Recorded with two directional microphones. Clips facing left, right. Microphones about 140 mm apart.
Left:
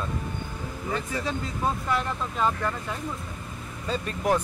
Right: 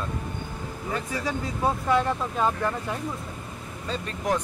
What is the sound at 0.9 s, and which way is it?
Speech, 10° right (ahead or behind).